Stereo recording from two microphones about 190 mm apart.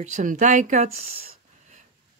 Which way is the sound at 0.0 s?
40° right (ahead or behind).